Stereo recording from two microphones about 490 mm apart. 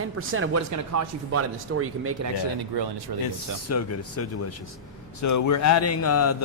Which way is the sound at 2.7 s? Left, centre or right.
Right.